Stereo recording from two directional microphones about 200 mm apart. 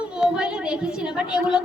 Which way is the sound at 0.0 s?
5° right (ahead or behind).